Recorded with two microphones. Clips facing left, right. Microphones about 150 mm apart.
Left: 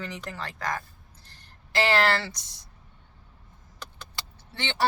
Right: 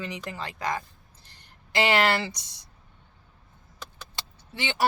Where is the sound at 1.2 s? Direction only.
15° right (ahead or behind).